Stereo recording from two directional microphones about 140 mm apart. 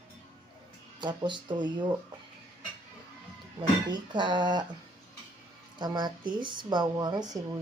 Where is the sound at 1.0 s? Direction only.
35° right (ahead or behind).